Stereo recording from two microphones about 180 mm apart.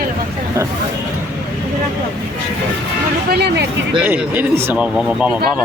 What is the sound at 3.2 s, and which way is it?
Speech, 65° right (ahead or behind).